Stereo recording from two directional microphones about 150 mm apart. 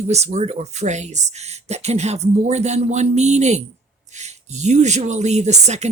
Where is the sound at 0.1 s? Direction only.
50° right (ahead or behind).